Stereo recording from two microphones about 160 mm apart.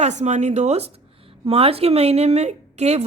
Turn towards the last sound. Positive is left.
turn(degrees=-45)  # may be behind; listen again after turning